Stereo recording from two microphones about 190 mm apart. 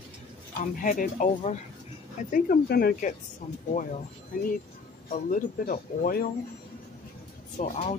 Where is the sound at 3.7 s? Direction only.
40° left (ahead or behind).